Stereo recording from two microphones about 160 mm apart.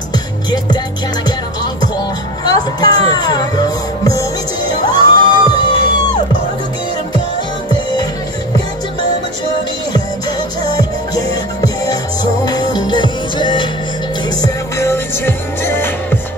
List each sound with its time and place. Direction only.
2.4 s speech: 25° left (ahead or behind)
4.9 s music: 25° left (ahead or behind)
7.7 s music: 25° left (ahead or behind)
10.6 s music: 25° left (ahead or behind)
14.4 s music: 20° left (ahead or behind)